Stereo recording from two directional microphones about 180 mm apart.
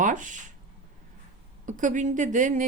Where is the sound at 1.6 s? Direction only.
45° right (ahead or behind).